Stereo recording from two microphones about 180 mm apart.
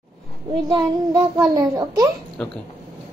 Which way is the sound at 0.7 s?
20° right (ahead or behind).